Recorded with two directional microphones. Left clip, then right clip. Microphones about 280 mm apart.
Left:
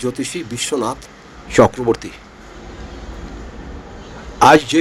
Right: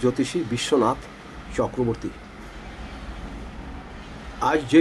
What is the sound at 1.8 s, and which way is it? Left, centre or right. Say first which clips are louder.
Speech: left 10 dB; left.